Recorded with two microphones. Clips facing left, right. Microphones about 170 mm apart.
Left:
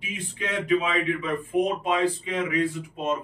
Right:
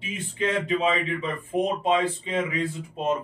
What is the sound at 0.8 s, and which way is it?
Speech, 25° right (ahead or behind).